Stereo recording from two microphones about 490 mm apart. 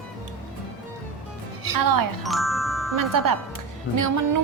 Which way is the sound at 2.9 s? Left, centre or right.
Right.